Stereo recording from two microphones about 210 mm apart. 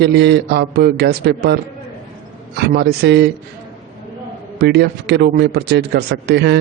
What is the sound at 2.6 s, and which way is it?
Speech, 50° right (ahead or behind).